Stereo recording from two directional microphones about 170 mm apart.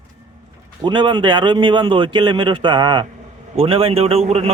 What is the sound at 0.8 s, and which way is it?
A man's voice, 25° right (ahead or behind).